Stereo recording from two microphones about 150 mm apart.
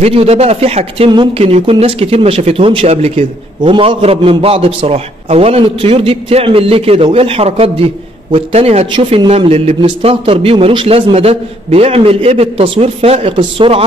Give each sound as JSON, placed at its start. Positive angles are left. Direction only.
{"t": 0.0, "sound": "speech", "side_deg": -40}